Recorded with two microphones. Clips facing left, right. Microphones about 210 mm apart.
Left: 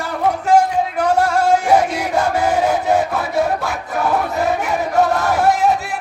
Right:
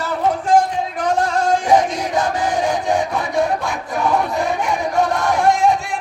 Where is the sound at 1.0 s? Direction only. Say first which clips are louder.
Left 2 dB; 10° left (ahead or behind).